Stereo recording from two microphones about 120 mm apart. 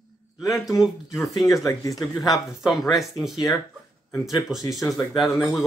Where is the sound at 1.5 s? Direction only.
30° left (ahead or behind).